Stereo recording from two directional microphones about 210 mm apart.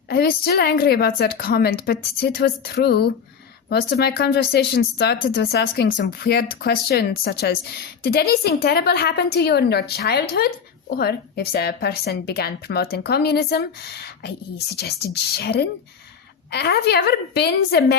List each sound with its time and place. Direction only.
0.1 s a woman's voice: 45° left (ahead or behind)